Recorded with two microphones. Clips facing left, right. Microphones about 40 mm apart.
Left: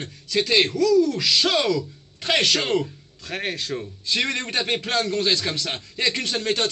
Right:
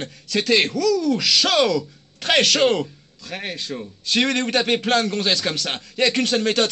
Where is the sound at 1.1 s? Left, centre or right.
Right.